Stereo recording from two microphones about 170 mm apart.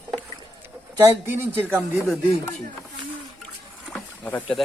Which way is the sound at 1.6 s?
10° right (ahead or behind).